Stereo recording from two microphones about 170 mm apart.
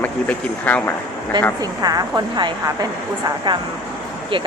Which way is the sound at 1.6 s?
25° right (ahead or behind).